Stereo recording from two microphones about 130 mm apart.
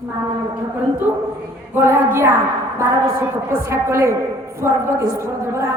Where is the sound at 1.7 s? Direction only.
20° right (ahead or behind).